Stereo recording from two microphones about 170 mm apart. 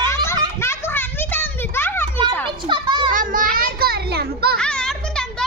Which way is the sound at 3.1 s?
55° right (ahead or behind).